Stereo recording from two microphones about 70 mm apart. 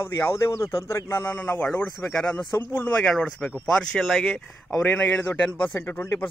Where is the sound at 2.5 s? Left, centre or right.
Left.